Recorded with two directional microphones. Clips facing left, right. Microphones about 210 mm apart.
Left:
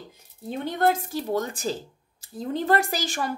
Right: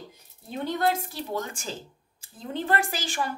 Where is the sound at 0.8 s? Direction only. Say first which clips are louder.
Left 5 dB; 45° left (ahead or behind).